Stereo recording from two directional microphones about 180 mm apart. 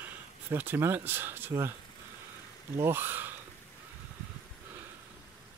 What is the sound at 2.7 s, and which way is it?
Speech, 15° right (ahead or behind).